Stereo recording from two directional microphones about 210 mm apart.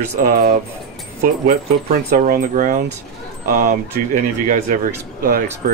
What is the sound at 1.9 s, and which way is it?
Speech, 45° right (ahead or behind).